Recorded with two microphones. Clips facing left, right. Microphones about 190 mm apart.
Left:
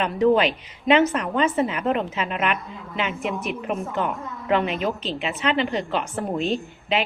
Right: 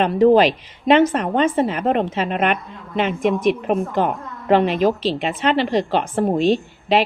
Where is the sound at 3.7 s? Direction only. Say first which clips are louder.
Right 3 dB; 50° right (ahead or behind).